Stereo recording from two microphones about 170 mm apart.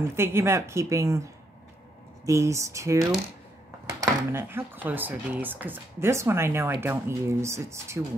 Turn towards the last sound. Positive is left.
turn(degrees=-15)  # may be behind; listen again after turning